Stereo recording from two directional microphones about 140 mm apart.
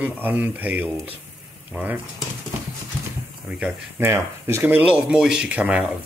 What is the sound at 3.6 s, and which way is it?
Speech, 15° right (ahead or behind).